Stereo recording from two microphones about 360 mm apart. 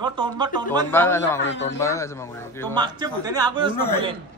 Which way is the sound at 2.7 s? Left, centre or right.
Centre.